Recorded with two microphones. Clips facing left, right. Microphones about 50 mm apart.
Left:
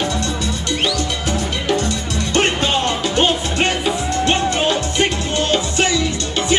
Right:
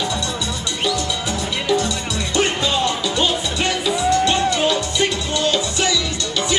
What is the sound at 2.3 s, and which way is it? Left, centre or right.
Music, left.